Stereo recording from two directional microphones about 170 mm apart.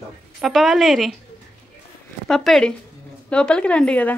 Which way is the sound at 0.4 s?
Centre (ahead or behind).